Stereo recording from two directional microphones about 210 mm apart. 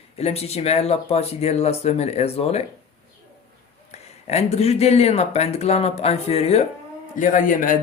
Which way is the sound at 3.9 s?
30° left (ahead or behind).